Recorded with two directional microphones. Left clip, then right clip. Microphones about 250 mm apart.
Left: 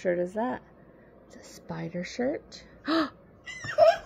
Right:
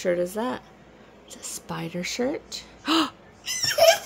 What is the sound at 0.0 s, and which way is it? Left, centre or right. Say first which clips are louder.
Speech: right 3 dB; centre.